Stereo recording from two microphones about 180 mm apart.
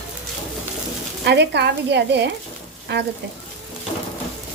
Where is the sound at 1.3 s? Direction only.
65° right (ahead or behind).